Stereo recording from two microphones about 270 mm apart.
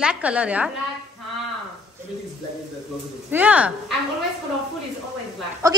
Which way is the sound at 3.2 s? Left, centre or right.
Centre.